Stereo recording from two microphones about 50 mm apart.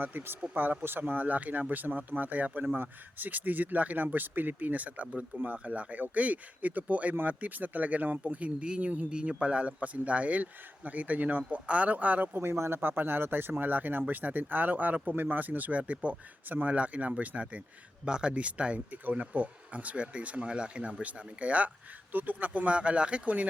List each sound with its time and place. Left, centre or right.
0.0 s speech: right
9.0 s speech: centre